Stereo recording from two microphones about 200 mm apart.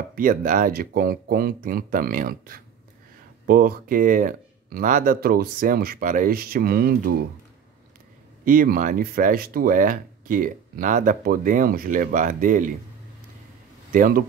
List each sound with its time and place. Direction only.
0.1 s speech: 40° right (ahead or behind)
8.5 s speech: 45° right (ahead or behind)
13.9 s speech: 45° right (ahead or behind)